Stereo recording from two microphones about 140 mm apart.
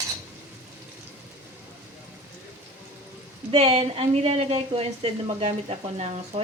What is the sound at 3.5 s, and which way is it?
A woman's voice, 45° right (ahead or behind).